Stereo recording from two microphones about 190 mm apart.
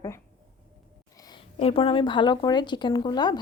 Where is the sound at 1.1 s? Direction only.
20° left (ahead or behind).